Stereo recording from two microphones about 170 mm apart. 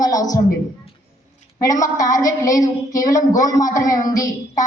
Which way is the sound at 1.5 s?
20° left (ahead or behind).